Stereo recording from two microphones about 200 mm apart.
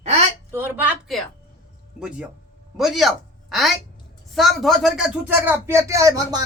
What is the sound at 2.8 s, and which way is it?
A man's voice, centre (ahead or behind).